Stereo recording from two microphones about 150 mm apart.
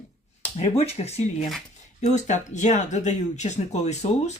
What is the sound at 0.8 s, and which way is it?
Speech, 45° left (ahead or behind).